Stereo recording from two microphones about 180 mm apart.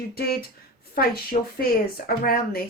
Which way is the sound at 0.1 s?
60° left (ahead or behind).